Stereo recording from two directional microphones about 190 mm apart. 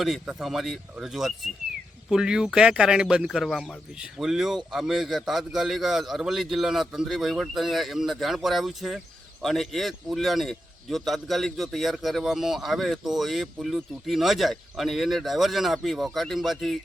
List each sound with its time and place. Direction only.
0.0 s speech: centre (ahead or behind)